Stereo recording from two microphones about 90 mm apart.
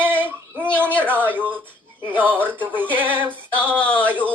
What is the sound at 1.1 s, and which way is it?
Speech, 20° right (ahead or behind).